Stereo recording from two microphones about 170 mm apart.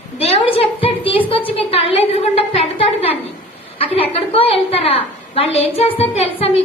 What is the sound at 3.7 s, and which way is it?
A woman's voice, 35° left (ahead or behind).